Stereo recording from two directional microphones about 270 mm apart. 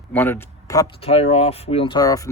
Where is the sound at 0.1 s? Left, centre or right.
Centre.